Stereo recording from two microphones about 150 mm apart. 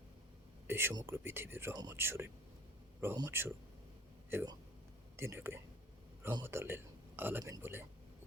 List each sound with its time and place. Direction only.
0.7 s speech: 15° right (ahead or behind)
1.7 s speech: 25° right (ahead or behind)
2.0 s speech: 15° right (ahead or behind)